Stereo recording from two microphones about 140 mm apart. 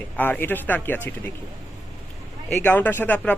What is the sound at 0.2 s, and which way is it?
Speech, 15° left (ahead or behind).